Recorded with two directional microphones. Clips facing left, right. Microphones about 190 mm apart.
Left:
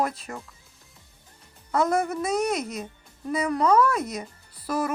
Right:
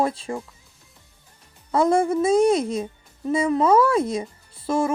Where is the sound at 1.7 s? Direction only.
30° right (ahead or behind).